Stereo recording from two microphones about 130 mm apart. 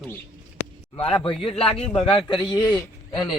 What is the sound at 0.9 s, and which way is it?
A man's voice, 45° left (ahead or behind).